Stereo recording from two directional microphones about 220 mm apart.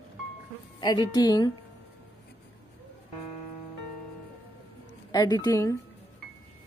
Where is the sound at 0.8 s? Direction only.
20° left (ahead or behind).